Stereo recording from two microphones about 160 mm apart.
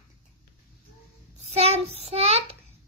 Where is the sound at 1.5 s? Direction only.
40° right (ahead or behind).